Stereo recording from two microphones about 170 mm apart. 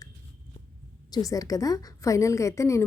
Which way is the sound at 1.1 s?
20° left (ahead or behind).